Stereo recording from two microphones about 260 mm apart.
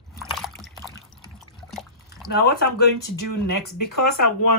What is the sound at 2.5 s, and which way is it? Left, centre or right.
Speech, left.